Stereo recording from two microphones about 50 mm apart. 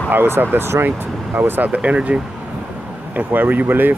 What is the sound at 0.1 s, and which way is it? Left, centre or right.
Speech, right.